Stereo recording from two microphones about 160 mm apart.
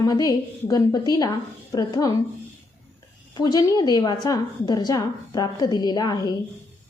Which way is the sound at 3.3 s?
25° left (ahead or behind).